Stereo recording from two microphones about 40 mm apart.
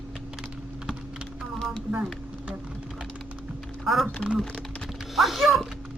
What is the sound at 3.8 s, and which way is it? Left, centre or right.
Music, centre.